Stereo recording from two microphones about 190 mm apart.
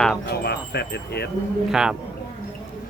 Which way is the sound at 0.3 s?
60° left (ahead or behind).